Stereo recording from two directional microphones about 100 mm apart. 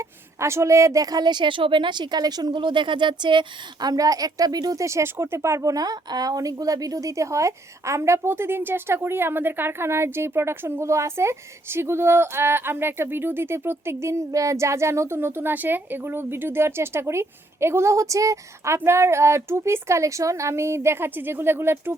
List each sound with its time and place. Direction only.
0.0 s a woman's voice: 30° right (ahead or behind)